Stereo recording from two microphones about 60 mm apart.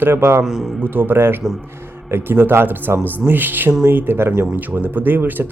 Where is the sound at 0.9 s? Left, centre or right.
Right.